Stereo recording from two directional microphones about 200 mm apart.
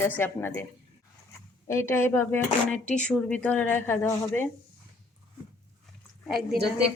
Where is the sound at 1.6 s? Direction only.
15° left (ahead or behind).